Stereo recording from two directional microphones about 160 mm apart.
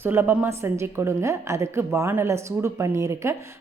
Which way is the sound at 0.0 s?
15° right (ahead or behind).